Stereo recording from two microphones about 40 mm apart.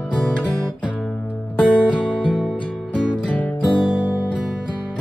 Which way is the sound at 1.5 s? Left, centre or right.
Left.